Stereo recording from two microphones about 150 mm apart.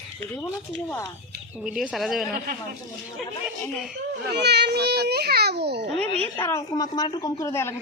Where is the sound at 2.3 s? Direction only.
80° right.